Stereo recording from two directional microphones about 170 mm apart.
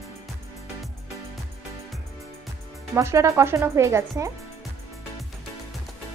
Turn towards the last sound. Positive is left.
turn(degrees=-15)  # may be behind; listen again after turning